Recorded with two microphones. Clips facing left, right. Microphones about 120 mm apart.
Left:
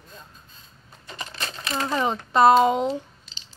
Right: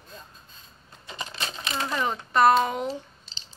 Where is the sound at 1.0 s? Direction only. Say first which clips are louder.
Even; 20° right (ahead or behind).